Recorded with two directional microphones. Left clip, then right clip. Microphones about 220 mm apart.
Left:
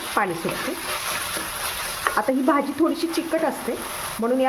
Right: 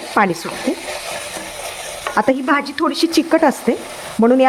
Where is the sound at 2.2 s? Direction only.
50° right (ahead or behind).